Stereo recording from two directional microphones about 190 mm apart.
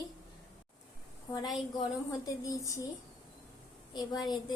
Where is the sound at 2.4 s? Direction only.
20° left (ahead or behind).